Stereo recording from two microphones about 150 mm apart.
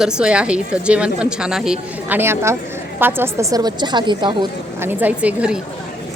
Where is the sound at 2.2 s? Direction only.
15° right (ahead or behind).